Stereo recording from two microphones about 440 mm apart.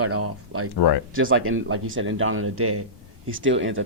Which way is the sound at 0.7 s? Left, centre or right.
Left.